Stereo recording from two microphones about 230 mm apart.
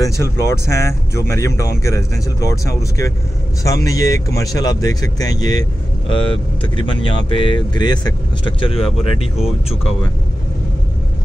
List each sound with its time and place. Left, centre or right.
0.0 s speech: centre